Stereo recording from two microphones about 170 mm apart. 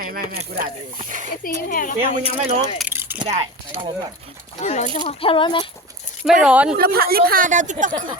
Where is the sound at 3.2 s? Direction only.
35° right (ahead or behind).